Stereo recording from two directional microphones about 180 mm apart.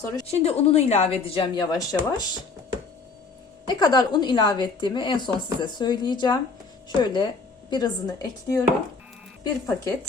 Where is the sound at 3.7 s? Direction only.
25° left (ahead or behind).